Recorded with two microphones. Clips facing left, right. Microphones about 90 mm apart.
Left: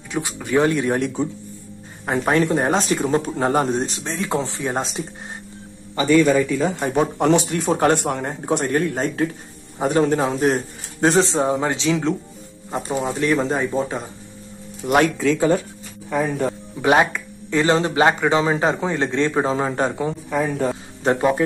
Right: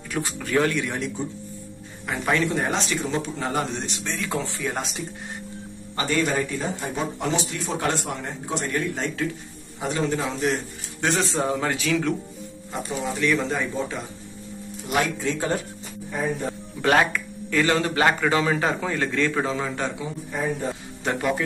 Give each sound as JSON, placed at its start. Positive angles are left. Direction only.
{"t": 0.1, "sound": "speech", "side_deg": 15}
{"t": 0.8, "sound": "speech", "side_deg": 50}
{"t": 2.0, "sound": "speech", "side_deg": 40}
{"t": 6.8, "sound": "speech", "side_deg": 60}
{"t": 12.8, "sound": "speech", "side_deg": 40}
{"t": 14.9, "sound": "speech", "side_deg": 60}
{"t": 16.1, "sound": "speech", "side_deg": 90}
{"t": 16.8, "sound": "speech", "side_deg": 20}
{"t": 20.1, "sound": "a man's voice", "side_deg": 85}
{"t": 21.0, "sound": "speech", "side_deg": 35}